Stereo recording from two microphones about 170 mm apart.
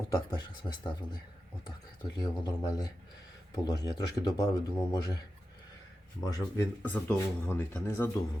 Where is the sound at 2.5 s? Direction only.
25° left (ahead or behind).